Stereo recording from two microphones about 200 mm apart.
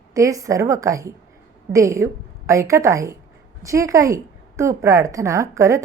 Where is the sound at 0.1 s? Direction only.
15° right (ahead or behind).